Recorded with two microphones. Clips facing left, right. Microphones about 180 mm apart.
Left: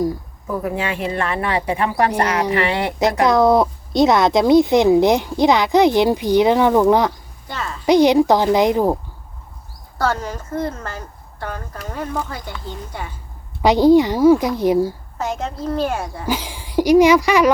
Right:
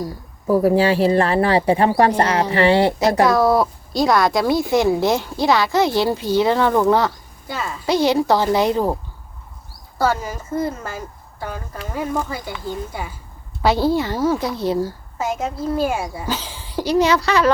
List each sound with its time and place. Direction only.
0.4 s speech: 35° right (ahead or behind)
3.2 s speech: 20° left (ahead or behind)
7.4 s a sound: 5° right (ahead or behind)
7.9 s speech: 15° left (ahead or behind)
10.0 s speech: 5° right (ahead or behind)
13.6 s speech: 15° left (ahead or behind)
15.2 s speech: 5° right (ahead or behind)
16.2 s speech: 15° left (ahead or behind)